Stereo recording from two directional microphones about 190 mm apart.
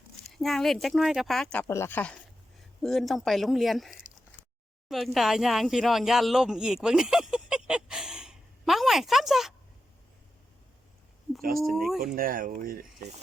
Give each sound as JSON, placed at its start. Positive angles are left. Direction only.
{"t": 0.3, "sound": "speech", "side_deg": 0}
{"t": 1.6, "sound": "speech", "side_deg": 15}
{"t": 4.9, "sound": "a sound", "side_deg": 0}
{"t": 11.6, "sound": "speech", "side_deg": 0}
{"t": 11.9, "sound": "speech", "side_deg": -50}